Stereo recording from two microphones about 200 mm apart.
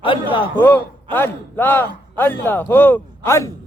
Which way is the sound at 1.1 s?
10° left (ahead or behind).